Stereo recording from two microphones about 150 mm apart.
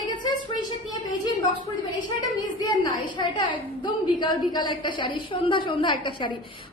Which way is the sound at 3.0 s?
30° left (ahead or behind).